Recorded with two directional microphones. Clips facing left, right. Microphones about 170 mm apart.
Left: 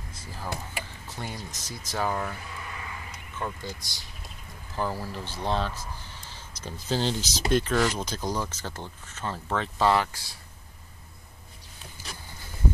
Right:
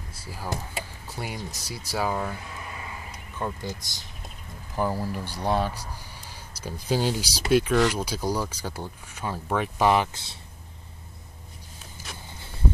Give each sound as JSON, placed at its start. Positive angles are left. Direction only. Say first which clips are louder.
{"t": 0.1, "sound": "power windows", "louder": "right 2 dB", "side_deg": -10}
{"t": 1.0, "sound": "speech", "louder": "right 4 dB", "side_deg": -10}
{"t": 2.7, "sound": "a sound", "louder": "right 1 dB", "side_deg": -25}
{"t": 3.3, "sound": "speech", "louder": "right 3 dB", "side_deg": -15}